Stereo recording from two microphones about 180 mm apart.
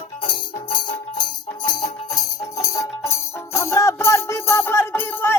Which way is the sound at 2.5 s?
20° left (ahead or behind).